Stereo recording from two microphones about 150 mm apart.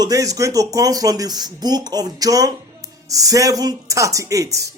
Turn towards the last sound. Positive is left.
turn(degrees=-20)  # may be behind; listen again after turning